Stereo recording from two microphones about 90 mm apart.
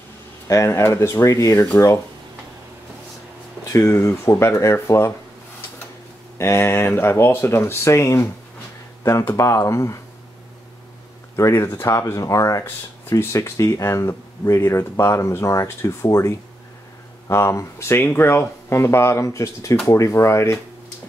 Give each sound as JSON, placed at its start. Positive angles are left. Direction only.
{"t": 0.5, "sound": "speech", "side_deg": 35}
{"t": 3.8, "sound": "speech", "side_deg": 25}
{"t": 6.3, "sound": "speech", "side_deg": 30}
{"t": 11.3, "sound": "speech", "side_deg": 30}